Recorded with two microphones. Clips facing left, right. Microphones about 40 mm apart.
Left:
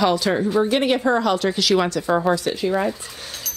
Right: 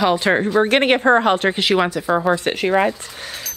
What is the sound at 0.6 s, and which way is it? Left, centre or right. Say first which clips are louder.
Speech: right 4 dB; right.